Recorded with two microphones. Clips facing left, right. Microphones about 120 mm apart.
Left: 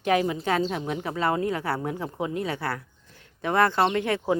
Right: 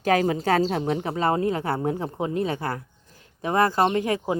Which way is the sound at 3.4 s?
35° right (ahead or behind).